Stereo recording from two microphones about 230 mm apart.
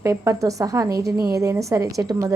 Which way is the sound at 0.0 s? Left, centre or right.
Centre.